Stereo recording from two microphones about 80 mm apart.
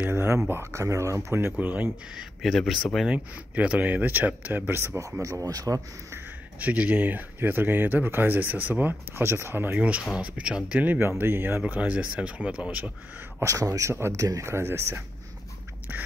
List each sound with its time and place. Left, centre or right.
0.1 s speech: right
2.1 s speech: centre
3.1 s speech: centre; by 5.1 s right
5.2 s speech: right
6.6 s speech: centre
9.8 s speech: centre
13.4 s speech: right